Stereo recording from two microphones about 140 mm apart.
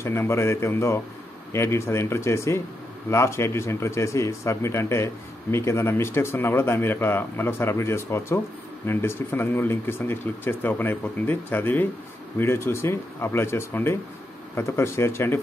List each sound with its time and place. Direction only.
0.0 s speech: 20° left (ahead or behind)